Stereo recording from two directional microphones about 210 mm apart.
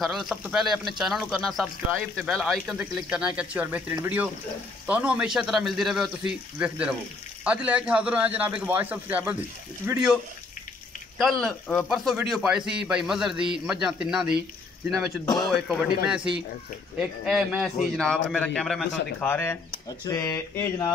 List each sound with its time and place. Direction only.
0.0 s a man's voice: centre (ahead or behind)
11.1 s a man's voice: centre (ahead or behind)
17.2 s a man's voice: 5° right (ahead or behind)
19.1 s a sound: 10° left (ahead or behind)